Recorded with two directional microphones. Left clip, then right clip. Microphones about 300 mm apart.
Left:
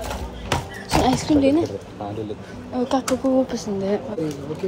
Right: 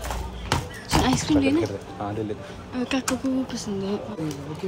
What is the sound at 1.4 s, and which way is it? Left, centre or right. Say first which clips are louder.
Speech: left 5 dB; centre.